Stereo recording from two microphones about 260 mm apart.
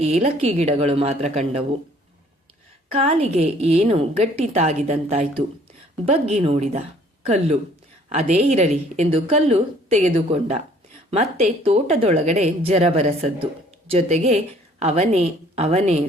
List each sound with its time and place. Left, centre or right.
0.0 s speech: right
2.9 s speech: right